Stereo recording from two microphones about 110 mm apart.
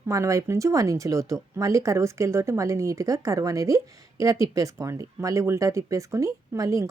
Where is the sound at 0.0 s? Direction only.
30° right (ahead or behind).